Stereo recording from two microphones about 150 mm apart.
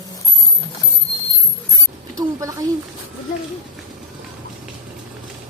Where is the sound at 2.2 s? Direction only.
20° right (ahead or behind).